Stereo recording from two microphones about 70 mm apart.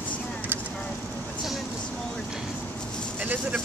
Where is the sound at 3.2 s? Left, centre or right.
Right.